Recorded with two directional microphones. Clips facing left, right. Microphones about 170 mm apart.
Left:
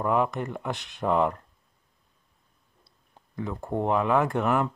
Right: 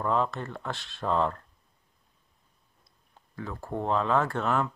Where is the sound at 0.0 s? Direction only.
15° left (ahead or behind).